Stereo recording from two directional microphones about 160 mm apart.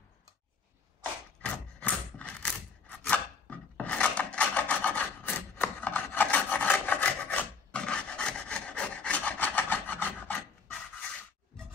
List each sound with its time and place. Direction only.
1.4 s wood: 10° left (ahead or behind)